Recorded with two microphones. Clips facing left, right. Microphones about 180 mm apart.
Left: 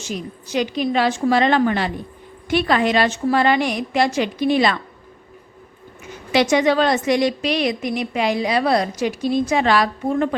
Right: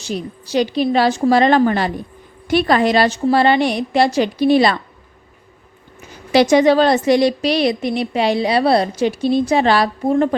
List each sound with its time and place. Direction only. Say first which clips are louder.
0.0 s a woman's voice: right 4 dB; 35° right (ahead or behind)
6.3 s a woman's voice: right 5 dB; 35° right (ahead or behind)